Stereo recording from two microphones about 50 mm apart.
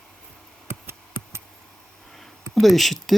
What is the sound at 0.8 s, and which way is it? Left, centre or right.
Hands, right.